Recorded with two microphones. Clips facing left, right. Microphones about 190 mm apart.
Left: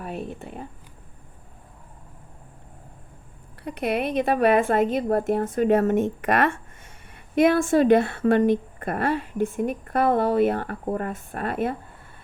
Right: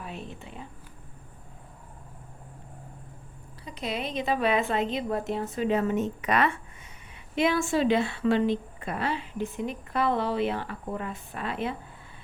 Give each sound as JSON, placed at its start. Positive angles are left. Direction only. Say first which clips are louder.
{"t": 0.0, "sound": "a woman's voice", "louder": "left 7 dB", "side_deg": 55}
{"t": 3.6, "sound": "a woman's voice", "louder": "left 8 dB", "side_deg": 60}